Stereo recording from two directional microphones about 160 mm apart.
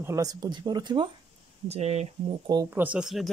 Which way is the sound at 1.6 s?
45° right (ahead or behind).